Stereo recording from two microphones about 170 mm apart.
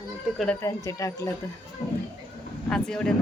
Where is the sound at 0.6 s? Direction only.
20° left (ahead or behind).